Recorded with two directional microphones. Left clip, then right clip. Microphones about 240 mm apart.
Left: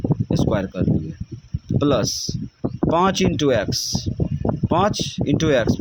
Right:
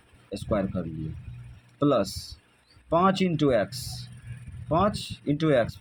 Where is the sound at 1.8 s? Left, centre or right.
Left.